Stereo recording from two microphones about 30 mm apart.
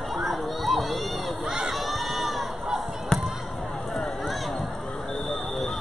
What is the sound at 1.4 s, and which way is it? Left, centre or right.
Crowd, centre.